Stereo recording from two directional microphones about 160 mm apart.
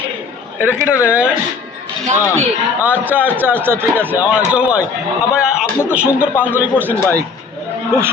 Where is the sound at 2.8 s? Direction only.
10° right (ahead or behind).